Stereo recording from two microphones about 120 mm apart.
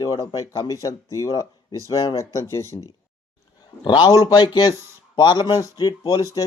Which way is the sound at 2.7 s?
35° left (ahead or behind).